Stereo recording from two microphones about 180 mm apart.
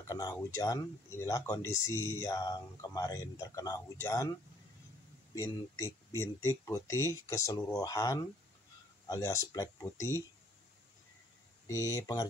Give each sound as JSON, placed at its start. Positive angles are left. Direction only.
{"t": 0.0, "sound": "speech", "side_deg": 20}
{"t": 11.6, "sound": "speech", "side_deg": 20}